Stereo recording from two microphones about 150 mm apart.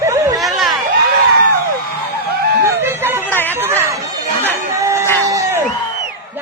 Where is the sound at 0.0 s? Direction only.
20° right (ahead or behind).